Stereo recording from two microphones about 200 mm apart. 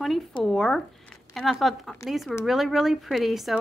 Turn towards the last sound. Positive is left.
turn(degrees=0)  # may be behind; listen again after turning